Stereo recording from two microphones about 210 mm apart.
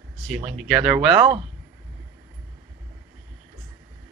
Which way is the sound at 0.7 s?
5° right (ahead or behind).